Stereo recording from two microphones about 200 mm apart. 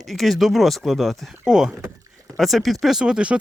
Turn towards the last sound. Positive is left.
turn(degrees=-5)  # may be behind; listen again after turning